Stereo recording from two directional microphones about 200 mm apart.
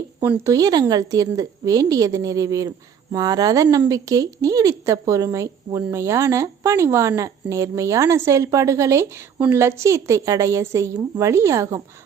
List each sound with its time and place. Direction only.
0.2 s a woman's voice: 15° right (ahead or behind)